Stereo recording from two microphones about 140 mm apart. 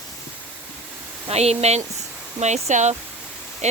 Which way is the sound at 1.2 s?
50° right (ahead or behind).